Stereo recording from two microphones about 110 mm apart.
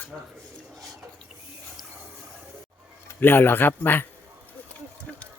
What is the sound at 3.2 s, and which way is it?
Speech, 20° left (ahead or behind).